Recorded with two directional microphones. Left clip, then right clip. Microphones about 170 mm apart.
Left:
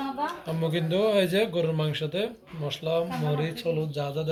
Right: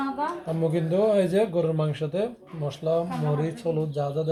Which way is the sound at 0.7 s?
35° right (ahead or behind).